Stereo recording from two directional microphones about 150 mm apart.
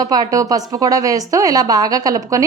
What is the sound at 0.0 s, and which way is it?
A woman's voice, 25° right (ahead or behind).